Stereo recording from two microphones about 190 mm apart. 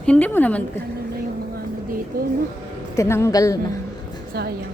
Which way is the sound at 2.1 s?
50° right (ahead or behind).